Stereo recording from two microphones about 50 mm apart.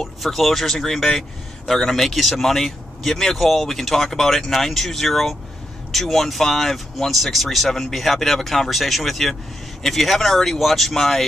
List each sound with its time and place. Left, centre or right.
0.2 s speech: centre